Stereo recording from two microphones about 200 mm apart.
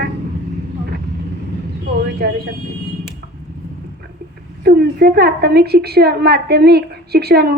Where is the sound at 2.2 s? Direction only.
50° right (ahead or behind).